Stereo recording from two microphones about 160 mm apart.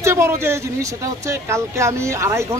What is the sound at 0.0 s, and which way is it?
A woman's voice, 15° right (ahead or behind).